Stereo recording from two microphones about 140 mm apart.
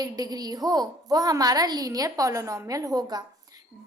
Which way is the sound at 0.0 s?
25° right (ahead or behind).